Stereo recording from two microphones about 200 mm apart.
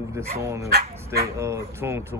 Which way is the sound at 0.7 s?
50° right (ahead or behind).